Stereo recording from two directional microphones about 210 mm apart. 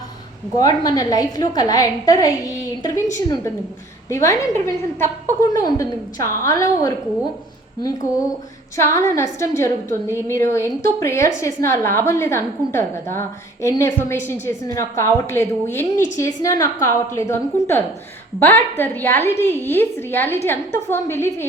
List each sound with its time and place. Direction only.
0.5 s a woman's voice: 15° left (ahead or behind)
8.7 s a woman's voice: 15° left (ahead or behind)